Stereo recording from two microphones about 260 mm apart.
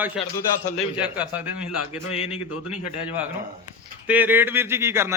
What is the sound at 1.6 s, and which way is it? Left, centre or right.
Speech, left.